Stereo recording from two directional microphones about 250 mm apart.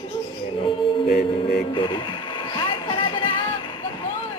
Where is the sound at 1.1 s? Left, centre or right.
Left.